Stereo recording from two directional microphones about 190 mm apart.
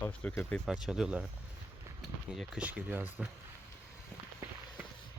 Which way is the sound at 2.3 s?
5° right (ahead or behind).